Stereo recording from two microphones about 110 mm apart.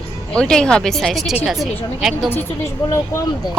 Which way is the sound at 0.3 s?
5° left (ahead or behind).